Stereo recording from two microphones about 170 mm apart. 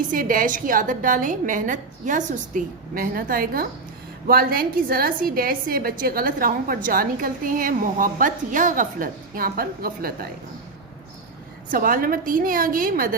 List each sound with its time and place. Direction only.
0.1 s a woman's voice: 55° right (ahead or behind)
11.7 s a woman's voice: 55° right (ahead or behind)